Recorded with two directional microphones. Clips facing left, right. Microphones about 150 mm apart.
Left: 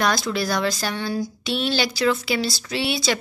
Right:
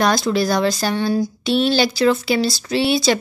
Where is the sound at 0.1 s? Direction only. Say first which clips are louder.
Right 6 dB; 35° right (ahead or behind).